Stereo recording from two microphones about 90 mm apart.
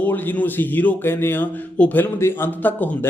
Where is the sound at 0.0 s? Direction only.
20° left (ahead or behind).